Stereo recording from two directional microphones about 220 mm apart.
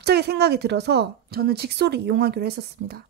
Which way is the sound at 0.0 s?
45° right (ahead or behind).